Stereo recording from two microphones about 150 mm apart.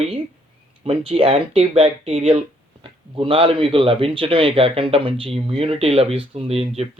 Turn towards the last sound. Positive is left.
turn(degrees=-40)  # may be behind; listen again after turning